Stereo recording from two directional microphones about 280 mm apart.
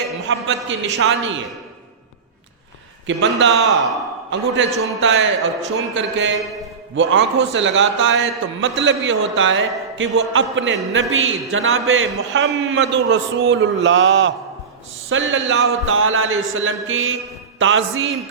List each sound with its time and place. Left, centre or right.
0.3 s a man's voice: right
3.1 s a man's voice: right